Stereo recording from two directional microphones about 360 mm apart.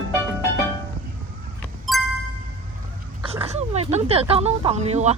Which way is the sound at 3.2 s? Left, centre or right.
Centre.